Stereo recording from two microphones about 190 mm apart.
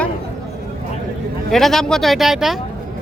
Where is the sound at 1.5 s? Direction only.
Centre (ahead or behind).